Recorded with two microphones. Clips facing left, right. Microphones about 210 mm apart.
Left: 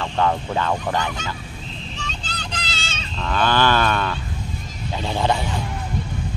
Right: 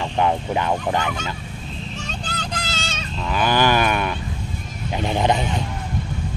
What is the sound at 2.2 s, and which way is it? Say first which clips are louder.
Vehicle: right 3 dB; 45° right (ahead or behind).